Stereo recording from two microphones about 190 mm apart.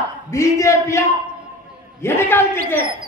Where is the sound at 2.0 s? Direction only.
10° left (ahead or behind).